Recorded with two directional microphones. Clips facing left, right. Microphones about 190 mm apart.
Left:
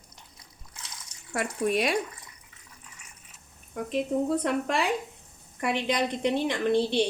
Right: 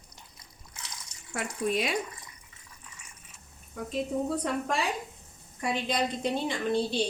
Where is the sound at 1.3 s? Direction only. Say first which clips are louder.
Left 3 dB; 60° left (ahead or behind).